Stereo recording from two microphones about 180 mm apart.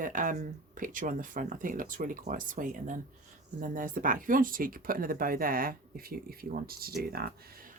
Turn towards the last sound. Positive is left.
turn(degrees=-55)  # may be behind; listen again after turning